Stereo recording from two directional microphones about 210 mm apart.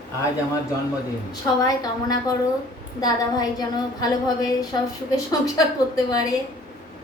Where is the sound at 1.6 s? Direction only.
20° left (ahead or behind).